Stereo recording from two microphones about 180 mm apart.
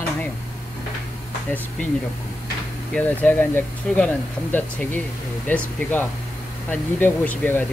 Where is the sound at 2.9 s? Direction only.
10° left (ahead or behind).